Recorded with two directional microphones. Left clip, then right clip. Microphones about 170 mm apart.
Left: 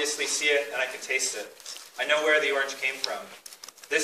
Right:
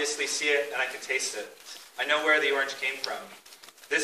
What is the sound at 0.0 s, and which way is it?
A man's voice, 20° left (ahead or behind).